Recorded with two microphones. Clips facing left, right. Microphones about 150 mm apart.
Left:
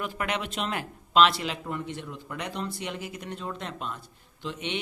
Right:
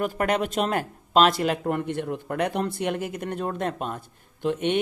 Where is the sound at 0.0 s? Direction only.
45° right (ahead or behind).